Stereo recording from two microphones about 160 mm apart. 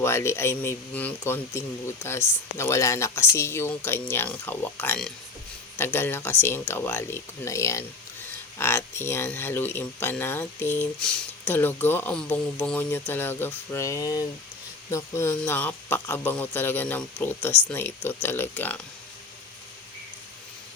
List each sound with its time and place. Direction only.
0.0 s speech: 15° left (ahead or behind)